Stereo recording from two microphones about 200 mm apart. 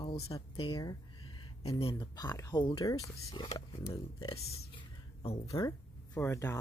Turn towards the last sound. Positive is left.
turn(degrees=15)  # may be behind; listen again after turning